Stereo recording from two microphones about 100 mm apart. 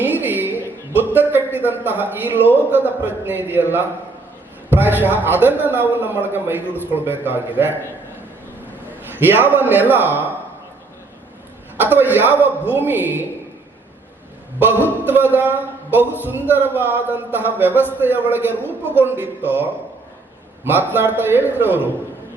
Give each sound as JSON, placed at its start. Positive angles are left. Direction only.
{"t": 0.0, "sound": "a sound", "side_deg": -20}
{"t": 0.9, "sound": "a man's voice", "side_deg": -20}
{"t": 9.1, "sound": "a man's voice", "side_deg": -20}
{"t": 11.8, "sound": "a man's voice", "side_deg": -20}
{"t": 14.6, "sound": "a man's voice", "side_deg": -20}
{"t": 20.7, "sound": "a man's voice", "side_deg": -20}